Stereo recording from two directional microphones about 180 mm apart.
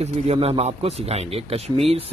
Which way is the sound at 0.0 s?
35° right (ahead or behind).